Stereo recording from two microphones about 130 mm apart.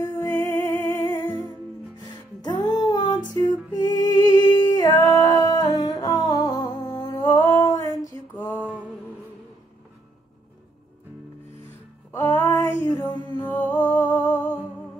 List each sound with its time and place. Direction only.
0.0 s music: 25° left (ahead or behind)
2.4 s music: 30° left (ahead or behind)
6.9 s a sound: 30° left (ahead or behind)
8.4 s music: 15° left (ahead or behind)
12.1 s a sound: 25° left (ahead or behind)
13.5 s music: 15° left (ahead or behind)